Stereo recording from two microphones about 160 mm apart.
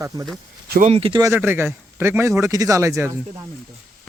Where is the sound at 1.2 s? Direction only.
15° right (ahead or behind).